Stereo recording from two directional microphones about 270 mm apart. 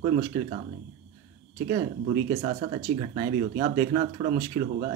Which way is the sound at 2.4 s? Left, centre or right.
Right.